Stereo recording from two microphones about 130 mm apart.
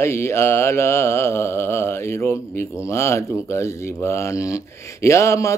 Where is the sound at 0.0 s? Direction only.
20° left (ahead or behind).